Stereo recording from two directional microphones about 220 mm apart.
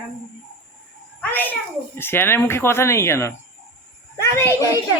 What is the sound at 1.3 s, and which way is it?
A child's voice, 10° left (ahead or behind).